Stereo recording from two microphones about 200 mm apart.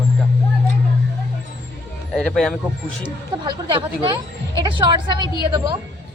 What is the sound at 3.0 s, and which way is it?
Speech, 25° right (ahead or behind).